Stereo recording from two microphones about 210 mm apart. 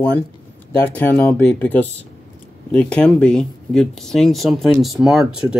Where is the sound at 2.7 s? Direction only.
5° left (ahead or behind).